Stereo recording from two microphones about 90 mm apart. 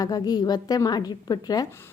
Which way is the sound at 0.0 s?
45° left (ahead or behind).